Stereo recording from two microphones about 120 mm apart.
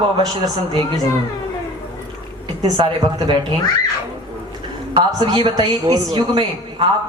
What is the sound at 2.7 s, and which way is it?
Speech, 40° right (ahead or behind).